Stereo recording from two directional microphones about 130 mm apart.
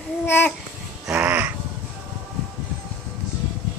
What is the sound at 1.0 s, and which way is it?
Crow, 10° right (ahead or behind).